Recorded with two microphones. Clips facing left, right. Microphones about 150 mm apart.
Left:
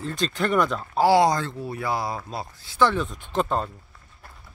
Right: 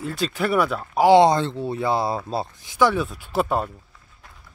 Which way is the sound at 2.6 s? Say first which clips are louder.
Right 1 dB; 15° right (ahead or behind).